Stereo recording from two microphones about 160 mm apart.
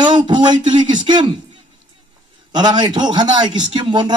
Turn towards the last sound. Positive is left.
turn(degrees=-30)  # may be behind; listen again after turning